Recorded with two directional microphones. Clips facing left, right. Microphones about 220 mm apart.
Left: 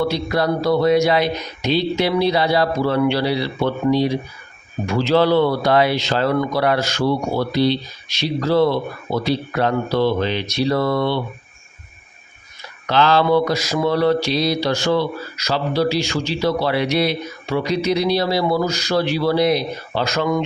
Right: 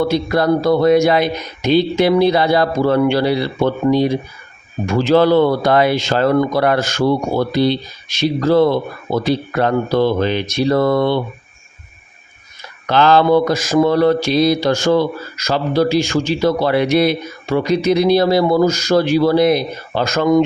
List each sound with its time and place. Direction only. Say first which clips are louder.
0.1 s speech: right 5 dB; 50° right (ahead or behind)
12.9 s speech: right 4 dB; 50° right (ahead or behind)